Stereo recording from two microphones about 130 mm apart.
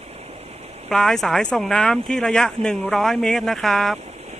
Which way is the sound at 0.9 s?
5° left (ahead or behind).